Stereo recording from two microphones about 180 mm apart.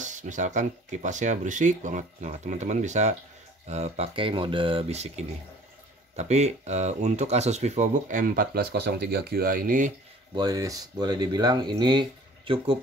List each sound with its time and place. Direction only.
0.0 s speech: 45° right (ahead or behind)
10.3 s speech: 20° right (ahead or behind)